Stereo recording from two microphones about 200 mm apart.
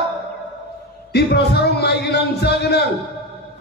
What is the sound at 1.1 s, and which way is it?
Speech, 55° left (ahead or behind).